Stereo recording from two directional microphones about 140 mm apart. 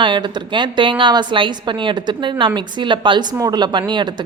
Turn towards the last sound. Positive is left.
turn(degrees=-30)  # may be behind; listen again after turning